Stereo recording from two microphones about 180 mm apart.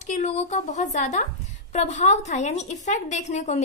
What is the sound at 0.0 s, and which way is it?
Speech, 40° left (ahead or behind).